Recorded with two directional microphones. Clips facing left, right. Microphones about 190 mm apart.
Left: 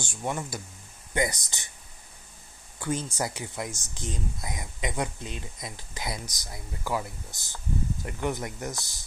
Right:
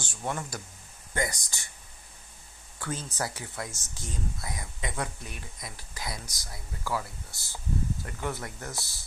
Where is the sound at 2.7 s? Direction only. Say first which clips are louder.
Left 4 dB; 15° left (ahead or behind).